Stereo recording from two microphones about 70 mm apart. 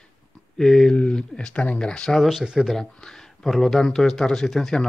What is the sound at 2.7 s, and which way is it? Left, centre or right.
Speech, centre.